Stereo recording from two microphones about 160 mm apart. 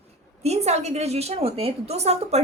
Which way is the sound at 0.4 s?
45° right (ahead or behind).